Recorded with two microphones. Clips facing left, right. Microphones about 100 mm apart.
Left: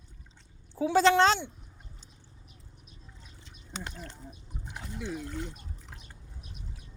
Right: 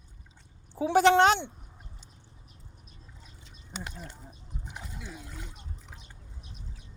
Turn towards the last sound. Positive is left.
turn(degrees=-5)  # may be behind; listen again after turning